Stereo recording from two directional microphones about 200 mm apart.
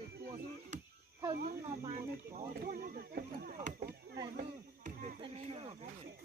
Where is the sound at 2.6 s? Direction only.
45° right (ahead or behind).